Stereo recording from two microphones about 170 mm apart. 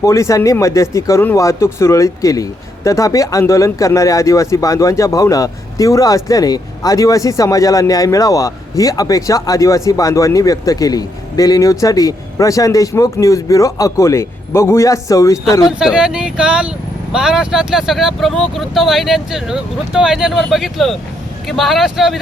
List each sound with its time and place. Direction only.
0.0 s speech: 20° left (ahead or behind)
15.8 s speech: 5° right (ahead or behind)